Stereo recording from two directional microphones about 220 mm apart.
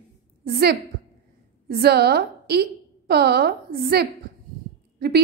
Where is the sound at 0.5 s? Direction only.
45° right (ahead or behind).